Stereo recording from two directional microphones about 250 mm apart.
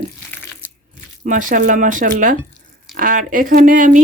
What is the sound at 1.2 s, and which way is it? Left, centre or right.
Speech, right.